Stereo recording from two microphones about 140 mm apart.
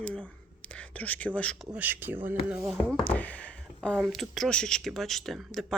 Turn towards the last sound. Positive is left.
turn(degrees=0)  # may be behind; listen again after turning